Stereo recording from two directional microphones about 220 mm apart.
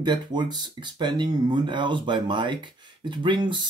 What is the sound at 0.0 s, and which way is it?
Speech, 20° right (ahead or behind).